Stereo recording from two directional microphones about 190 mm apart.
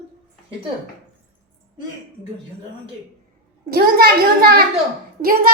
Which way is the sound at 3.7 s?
50° right (ahead or behind).